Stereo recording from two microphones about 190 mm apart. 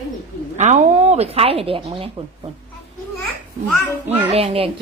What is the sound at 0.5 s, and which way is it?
Speech, 40° right (ahead or behind).